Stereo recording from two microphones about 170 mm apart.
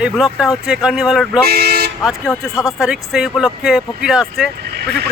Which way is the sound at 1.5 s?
65° right (ahead or behind).